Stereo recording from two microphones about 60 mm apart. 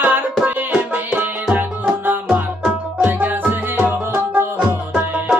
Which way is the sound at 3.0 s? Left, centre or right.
Right.